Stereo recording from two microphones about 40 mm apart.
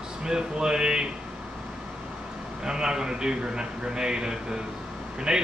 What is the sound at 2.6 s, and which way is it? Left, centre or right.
Speech, centre.